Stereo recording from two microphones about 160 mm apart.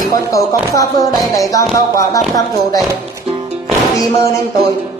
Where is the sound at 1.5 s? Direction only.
20° left (ahead or behind).